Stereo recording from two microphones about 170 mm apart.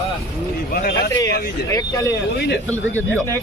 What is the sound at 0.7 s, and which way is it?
Speech, 65° left (ahead or behind).